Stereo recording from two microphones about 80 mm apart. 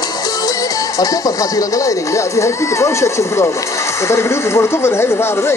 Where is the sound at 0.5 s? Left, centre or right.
Left.